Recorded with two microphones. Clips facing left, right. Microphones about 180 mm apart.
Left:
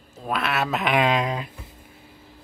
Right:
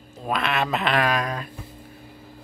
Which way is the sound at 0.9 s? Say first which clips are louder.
Left 5 dB; 20° left (ahead or behind).